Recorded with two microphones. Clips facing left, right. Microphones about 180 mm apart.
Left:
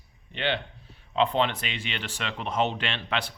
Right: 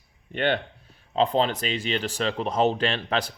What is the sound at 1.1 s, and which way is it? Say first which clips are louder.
Speech: right 2 dB; 35° right (ahead or behind).